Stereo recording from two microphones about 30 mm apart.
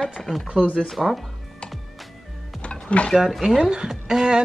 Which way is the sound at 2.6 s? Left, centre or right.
Left.